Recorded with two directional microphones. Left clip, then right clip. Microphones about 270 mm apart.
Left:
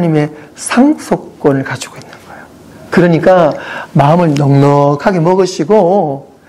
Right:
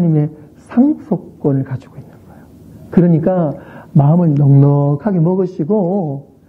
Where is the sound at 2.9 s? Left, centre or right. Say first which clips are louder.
Left 7 dB; centre.